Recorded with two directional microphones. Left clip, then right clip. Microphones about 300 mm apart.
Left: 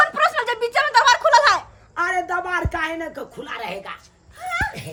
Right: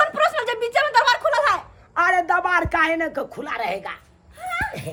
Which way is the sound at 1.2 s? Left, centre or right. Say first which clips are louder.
Left 5 dB; left.